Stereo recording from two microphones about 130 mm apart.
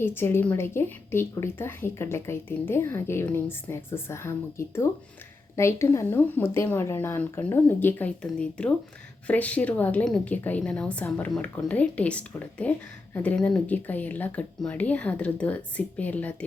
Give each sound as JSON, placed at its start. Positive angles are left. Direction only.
{"t": 0.0, "sound": "a woman's voice", "side_deg": 15}